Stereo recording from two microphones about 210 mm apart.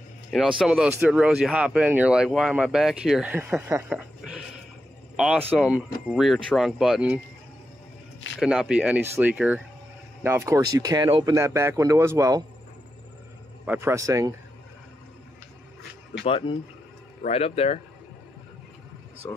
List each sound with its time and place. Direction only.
0.3 s speech: centre (ahead or behind)
8.4 s speech: 5° right (ahead or behind)
13.7 s speech: 10° right (ahead or behind)
16.3 s speech: 25° left (ahead or behind)
19.2 s speech: 10° left (ahead or behind)